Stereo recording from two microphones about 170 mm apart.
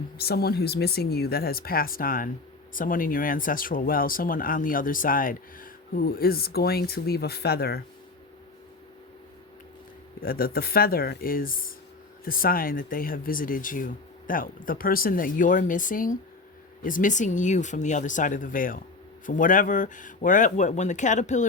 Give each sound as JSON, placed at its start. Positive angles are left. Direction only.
{"t": 0.2, "sound": "speech", "side_deg": 65}
{"t": 10.2, "sound": "speech", "side_deg": 60}